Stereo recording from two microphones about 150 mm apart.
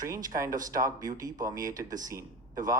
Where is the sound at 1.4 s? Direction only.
25° right (ahead or behind).